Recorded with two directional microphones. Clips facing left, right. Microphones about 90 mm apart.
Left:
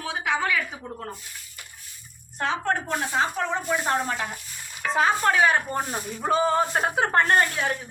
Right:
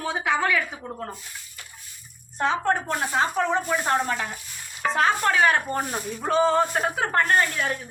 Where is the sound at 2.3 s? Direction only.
15° right (ahead or behind).